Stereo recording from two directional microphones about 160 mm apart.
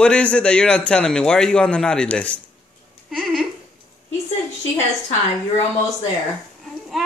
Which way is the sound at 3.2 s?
Centre (ahead or behind).